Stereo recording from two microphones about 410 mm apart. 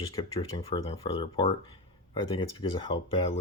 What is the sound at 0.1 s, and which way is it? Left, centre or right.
Speech, centre.